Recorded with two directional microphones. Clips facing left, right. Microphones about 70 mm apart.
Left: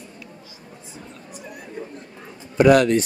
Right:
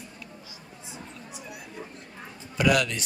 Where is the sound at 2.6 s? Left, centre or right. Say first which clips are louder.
Left 10 dB; left.